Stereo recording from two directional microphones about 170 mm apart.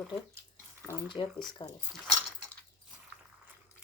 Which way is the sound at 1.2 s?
30° left (ahead or behind).